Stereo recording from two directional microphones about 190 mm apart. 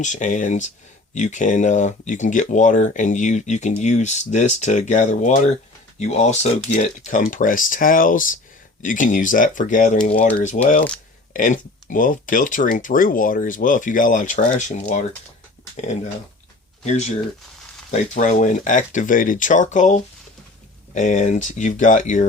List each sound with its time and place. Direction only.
0.0 s speech: 40° left (ahead or behind)
16.8 s speech: 35° left (ahead or behind)